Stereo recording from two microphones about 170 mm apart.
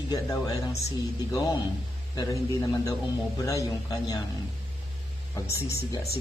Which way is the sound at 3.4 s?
20° left (ahead or behind).